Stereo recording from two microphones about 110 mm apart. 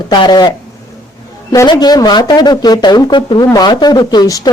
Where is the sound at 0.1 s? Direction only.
40° left (ahead or behind).